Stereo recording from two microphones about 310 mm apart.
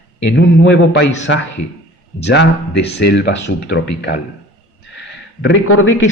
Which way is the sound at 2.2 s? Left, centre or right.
Left.